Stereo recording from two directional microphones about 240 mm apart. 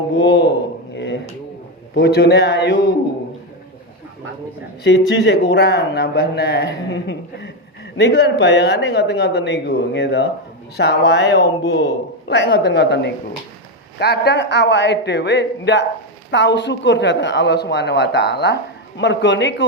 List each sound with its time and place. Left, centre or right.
0.2 s speech: left
0.9 s a sound: left
2.0 s speech: left
4.8 s speech: left